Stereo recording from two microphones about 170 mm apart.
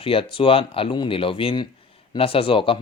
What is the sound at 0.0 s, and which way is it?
Speech, 30° left (ahead or behind).